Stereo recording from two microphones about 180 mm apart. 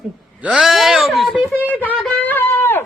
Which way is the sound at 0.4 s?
Centre (ahead or behind).